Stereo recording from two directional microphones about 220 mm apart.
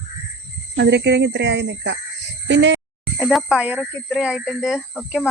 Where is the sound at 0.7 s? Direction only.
50° right (ahead or behind).